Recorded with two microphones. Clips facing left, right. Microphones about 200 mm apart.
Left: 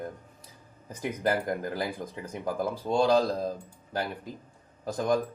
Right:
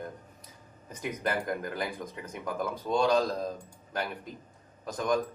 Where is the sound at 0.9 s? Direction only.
30° left (ahead or behind).